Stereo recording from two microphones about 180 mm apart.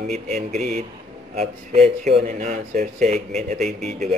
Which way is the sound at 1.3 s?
35° right (ahead or behind).